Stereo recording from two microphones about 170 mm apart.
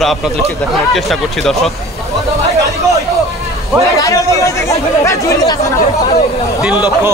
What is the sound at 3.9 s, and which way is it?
Speech, 20° left (ahead or behind).